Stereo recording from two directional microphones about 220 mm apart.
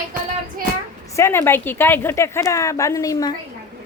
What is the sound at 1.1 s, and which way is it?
Speech, 10° left (ahead or behind).